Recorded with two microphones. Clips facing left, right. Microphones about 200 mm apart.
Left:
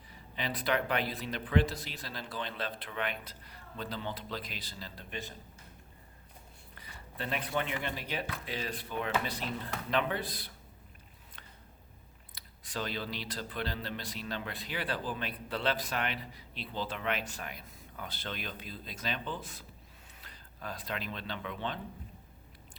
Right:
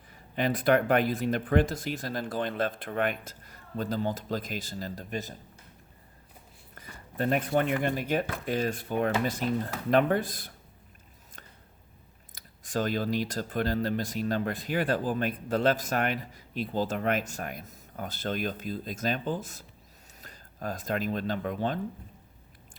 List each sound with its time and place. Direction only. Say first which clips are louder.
0.1 s speech: right 9 dB; 50° right (ahead or behind)
6.7 s speech: right 10 dB; 45° right (ahead or behind)
12.3 s speech: right 9 dB; 45° right (ahead or behind)